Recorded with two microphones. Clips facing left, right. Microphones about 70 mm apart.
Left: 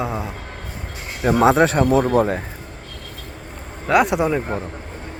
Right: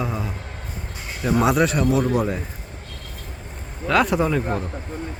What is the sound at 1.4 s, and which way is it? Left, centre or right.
Speech, left.